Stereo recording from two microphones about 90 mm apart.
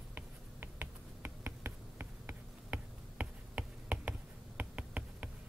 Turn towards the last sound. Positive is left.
turn(degrees=-15)  # may be behind; listen again after turning